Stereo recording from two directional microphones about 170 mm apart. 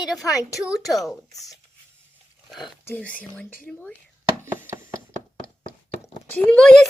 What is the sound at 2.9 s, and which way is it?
Speech, 10° left (ahead or behind).